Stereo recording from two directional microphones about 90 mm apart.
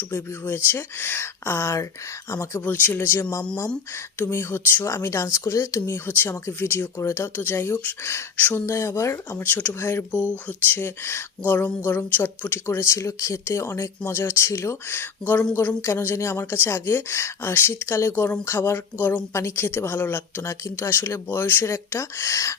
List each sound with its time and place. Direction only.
0.1 s speech: 25° left (ahead or behind)
2.6 s speech: 20° left (ahead or behind)
9.4 s speech: 20° left (ahead or behind)